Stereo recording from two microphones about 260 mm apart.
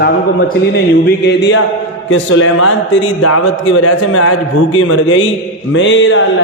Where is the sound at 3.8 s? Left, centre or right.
Left.